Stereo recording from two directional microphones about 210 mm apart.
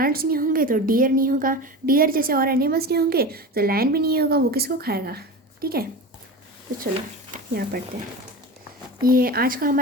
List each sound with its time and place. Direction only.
0.0 s a woman's voice: 45° right (ahead or behind)
7.3 s speech: 45° right (ahead or behind)
9.0 s a woman's voice: 45° right (ahead or behind)